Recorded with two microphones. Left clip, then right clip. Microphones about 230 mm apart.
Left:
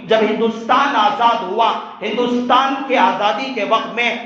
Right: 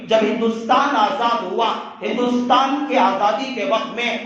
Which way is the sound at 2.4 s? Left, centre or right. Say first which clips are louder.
Left 2 dB; left.